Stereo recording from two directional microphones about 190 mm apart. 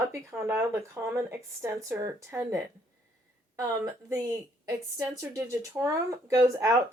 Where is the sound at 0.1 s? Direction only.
15° right (ahead or behind).